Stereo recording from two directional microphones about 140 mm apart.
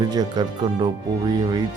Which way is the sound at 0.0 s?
30° right (ahead or behind).